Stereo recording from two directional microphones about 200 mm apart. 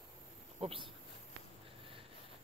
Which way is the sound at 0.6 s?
25° right (ahead or behind).